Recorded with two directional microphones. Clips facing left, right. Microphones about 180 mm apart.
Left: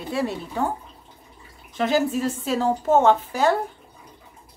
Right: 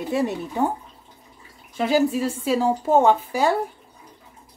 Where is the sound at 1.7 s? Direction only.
10° right (ahead or behind).